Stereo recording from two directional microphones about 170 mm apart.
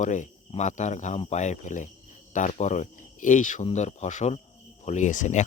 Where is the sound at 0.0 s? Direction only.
45° left (ahead or behind).